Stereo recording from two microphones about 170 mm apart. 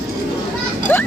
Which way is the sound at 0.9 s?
10° left (ahead or behind).